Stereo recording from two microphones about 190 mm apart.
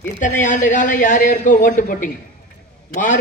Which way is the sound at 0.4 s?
40° left (ahead or behind).